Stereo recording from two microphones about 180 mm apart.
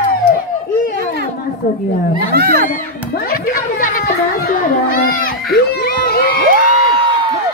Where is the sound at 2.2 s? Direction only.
55° right (ahead or behind).